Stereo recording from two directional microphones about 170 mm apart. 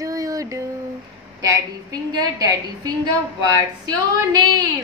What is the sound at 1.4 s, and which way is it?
A woman's voice, 20° right (ahead or behind).